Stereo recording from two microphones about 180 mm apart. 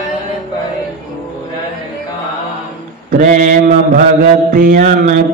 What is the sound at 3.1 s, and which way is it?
Mantra, 50° right (ahead or behind).